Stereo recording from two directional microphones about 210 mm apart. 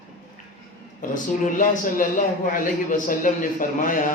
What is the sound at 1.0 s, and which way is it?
A man's voice, 40° left (ahead or behind).